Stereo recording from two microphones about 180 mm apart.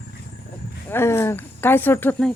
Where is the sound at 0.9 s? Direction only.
15° left (ahead or behind).